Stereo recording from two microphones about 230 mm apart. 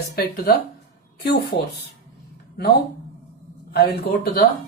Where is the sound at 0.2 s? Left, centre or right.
Left.